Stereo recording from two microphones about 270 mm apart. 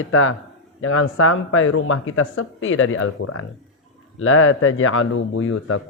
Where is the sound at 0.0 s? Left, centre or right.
Left.